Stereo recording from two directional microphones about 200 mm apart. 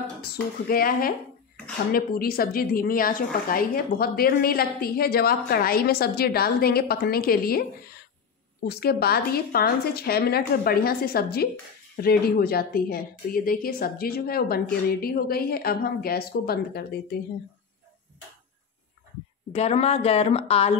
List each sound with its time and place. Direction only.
0.2 s a woman's voice: 45° left (ahead or behind)
8.6 s a woman's voice: 50° left (ahead or behind)
19.5 s a woman's voice: 30° left (ahead or behind)